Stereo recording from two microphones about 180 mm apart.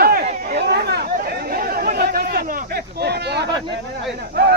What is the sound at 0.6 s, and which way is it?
Chatter, 65° right (ahead or behind).